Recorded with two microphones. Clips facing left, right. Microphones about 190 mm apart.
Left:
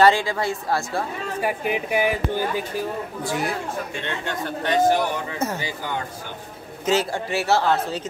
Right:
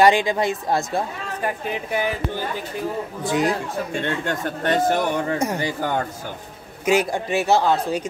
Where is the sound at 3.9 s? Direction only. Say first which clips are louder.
Right 5 dB; 45° right (ahead or behind).